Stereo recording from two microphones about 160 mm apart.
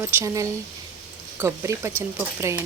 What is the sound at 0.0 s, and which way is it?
Speech, 15° right (ahead or behind).